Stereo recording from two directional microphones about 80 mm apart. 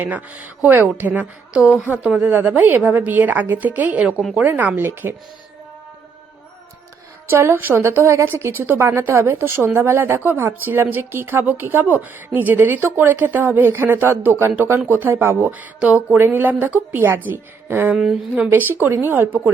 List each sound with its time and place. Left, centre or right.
0.0 s a woman's voice: centre
7.3 s a woman's voice: right
17.9 s a woman's voice: centre
18.8 s speech: right